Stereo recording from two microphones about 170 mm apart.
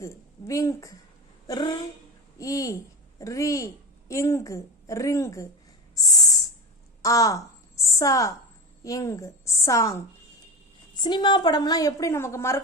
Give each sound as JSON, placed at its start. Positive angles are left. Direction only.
{"t": 0.0, "sound": "a woman's voice", "side_deg": 20}
{"t": 5.9, "sound": "a sound", "side_deg": 20}
{"t": 8.8, "sound": "a woman's voice", "side_deg": 20}
{"t": 11.0, "sound": "a woman's voice", "side_deg": 25}